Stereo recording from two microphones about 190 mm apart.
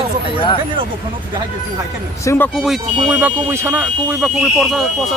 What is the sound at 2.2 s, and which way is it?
Speech, 10° left (ahead or behind).